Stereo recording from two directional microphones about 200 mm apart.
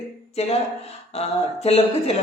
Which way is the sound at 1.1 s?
30° left (ahead or behind).